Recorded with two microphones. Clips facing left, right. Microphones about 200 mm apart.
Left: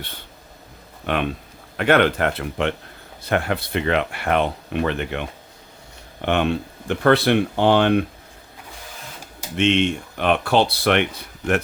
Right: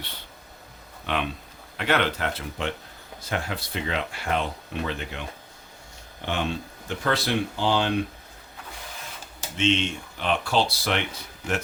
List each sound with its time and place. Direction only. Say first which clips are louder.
1.0 s speech: left 5 dB; 55° left (ahead or behind)
6.2 s speech: left 8 dB; 60° left (ahead or behind)
9.6 s speech: left 6 dB; 60° left (ahead or behind)